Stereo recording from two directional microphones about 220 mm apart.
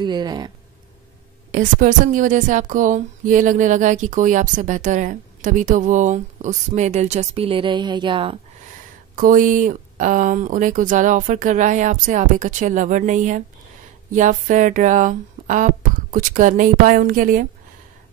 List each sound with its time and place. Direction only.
0.0 s speech: 20° right (ahead or behind)
1.5 s a woman's voice: 35° right (ahead or behind)
9.1 s a woman's voice: 40° right (ahead or behind)